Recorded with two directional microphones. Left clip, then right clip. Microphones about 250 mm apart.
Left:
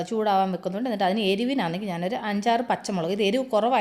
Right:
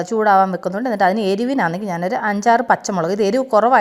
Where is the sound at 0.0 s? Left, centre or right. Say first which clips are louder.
Right 9 dB; right.